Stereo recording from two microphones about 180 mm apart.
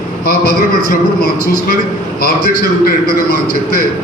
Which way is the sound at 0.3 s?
60° left (ahead or behind).